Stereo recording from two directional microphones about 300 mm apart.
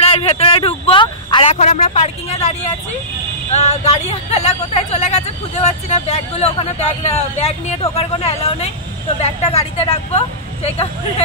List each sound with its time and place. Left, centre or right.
0.0 s speech: centre
3.5 s speech: left